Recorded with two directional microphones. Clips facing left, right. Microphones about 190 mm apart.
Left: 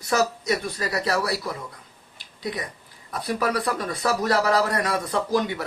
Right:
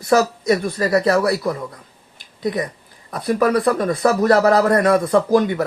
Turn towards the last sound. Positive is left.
turn(degrees=-55)  # may be behind; listen again after turning